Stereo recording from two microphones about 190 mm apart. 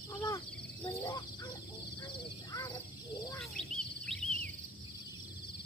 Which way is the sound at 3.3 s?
Centre (ahead or behind).